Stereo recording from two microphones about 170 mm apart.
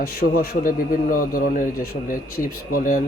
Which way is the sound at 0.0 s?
60° left (ahead or behind).